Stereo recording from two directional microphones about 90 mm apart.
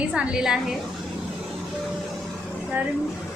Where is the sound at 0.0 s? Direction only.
10° right (ahead or behind).